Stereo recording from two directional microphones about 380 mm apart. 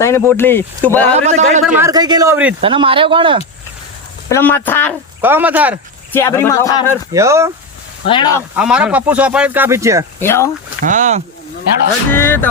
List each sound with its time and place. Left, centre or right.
0.0 s speech: centre
1.1 s speech: centre
4.3 s speech: centre
6.1 s speech: centre
7.1 s speech: centre
8.0 s speech: centre
8.5 s speech: centre
10.2 s speech: centre
10.8 s speech: centre
12.1 s speech: centre